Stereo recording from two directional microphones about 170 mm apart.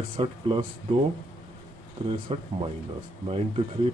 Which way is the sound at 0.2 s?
30° right (ahead or behind).